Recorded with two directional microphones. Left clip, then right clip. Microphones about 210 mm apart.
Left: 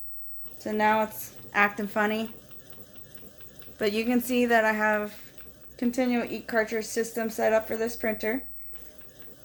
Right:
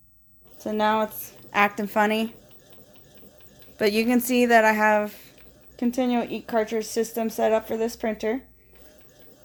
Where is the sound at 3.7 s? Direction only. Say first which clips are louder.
Right 4 dB; 35° right (ahead or behind).